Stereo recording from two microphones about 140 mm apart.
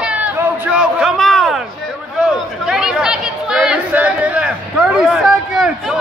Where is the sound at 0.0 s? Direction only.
10° right (ahead or behind).